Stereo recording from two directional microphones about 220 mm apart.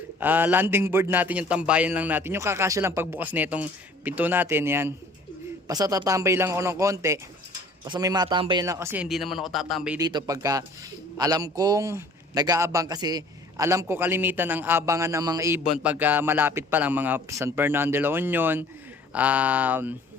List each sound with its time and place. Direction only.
0.2 s a man's voice: 10° right (ahead or behind)
10.0 s a man's voice: 20° right (ahead or behind)